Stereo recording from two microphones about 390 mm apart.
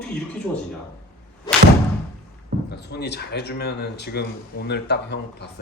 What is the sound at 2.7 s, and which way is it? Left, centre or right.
Speech, left.